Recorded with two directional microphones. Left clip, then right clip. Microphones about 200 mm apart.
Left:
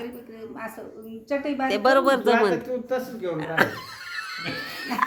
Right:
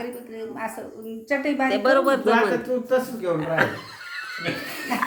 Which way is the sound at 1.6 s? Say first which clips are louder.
Left 1 dB; 50° left (ahead or behind).